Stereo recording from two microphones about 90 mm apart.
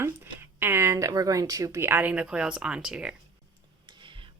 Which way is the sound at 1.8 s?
20° right (ahead or behind).